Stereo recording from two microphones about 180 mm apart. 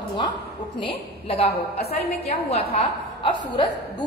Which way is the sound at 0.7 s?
30° left (ahead or behind).